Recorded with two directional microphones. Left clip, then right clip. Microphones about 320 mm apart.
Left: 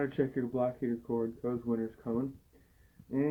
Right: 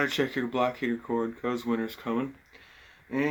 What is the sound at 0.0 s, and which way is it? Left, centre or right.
Speech, centre.